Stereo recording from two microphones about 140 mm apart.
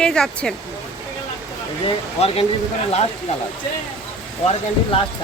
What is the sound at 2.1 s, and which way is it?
Speech, 45° left (ahead or behind).